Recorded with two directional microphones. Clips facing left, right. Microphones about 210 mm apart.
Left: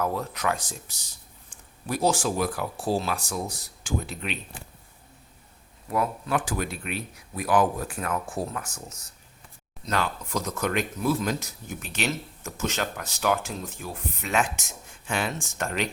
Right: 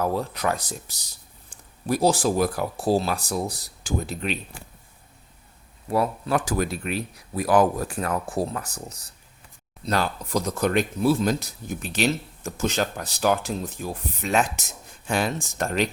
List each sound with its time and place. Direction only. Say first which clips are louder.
0.0 s speech: right 3 dB; 35° right (ahead or behind)
5.9 s speech: right 3 dB; 35° right (ahead or behind)